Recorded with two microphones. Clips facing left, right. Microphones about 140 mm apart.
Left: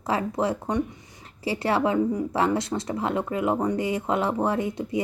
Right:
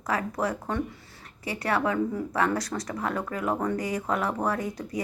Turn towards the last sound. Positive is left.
turn(degrees=25)  # may be behind; listen again after turning